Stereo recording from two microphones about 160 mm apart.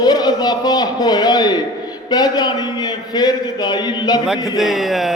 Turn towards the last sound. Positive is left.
turn(degrees=0)  # may be behind; listen again after turning